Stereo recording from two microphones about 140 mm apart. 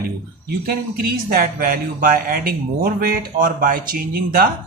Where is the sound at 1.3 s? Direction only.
90° right.